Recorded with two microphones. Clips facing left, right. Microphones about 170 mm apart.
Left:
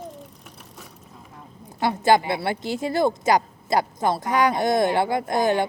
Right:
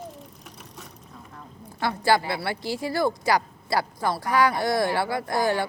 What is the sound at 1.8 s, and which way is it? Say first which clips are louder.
A woman's voice: left 4 dB; 20° left (ahead or behind).